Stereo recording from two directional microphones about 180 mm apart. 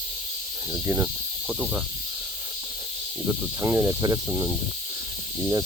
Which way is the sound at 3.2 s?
10° right (ahead or behind).